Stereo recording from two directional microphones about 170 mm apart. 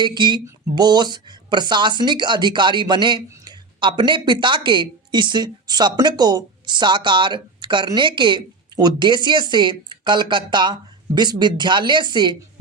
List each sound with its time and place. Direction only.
0.0 s speech: 25° right (ahead or behind)